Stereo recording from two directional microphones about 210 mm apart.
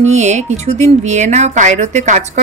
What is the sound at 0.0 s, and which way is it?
Speech, 35° right (ahead or behind).